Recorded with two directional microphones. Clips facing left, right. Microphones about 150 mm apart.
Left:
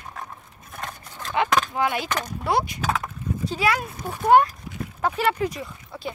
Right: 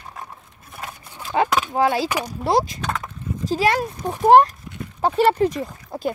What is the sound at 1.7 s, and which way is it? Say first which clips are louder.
Speech: right 5 dB; 35° right (ahead or behind).